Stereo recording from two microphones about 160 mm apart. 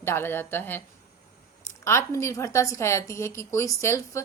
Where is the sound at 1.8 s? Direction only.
15° left (ahead or behind).